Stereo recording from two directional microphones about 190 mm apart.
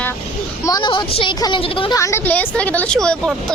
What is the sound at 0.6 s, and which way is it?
A woman's voice, 25° left (ahead or behind).